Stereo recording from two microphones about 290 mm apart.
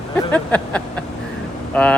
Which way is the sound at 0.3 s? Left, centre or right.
Centre.